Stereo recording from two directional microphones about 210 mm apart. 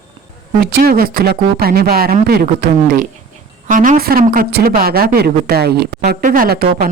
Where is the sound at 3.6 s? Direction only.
40° right (ahead or behind).